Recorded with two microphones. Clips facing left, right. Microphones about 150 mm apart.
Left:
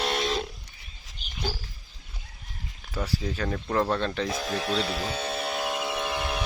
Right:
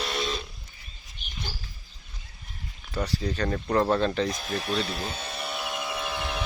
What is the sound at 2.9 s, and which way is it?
Speech, 5° left (ahead or behind).